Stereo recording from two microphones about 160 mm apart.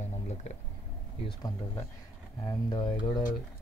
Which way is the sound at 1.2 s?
30° left (ahead or behind).